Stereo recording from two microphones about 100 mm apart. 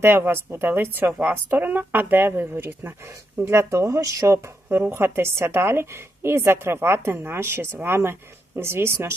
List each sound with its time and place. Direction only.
0.0 s speech: 25° right (ahead or behind)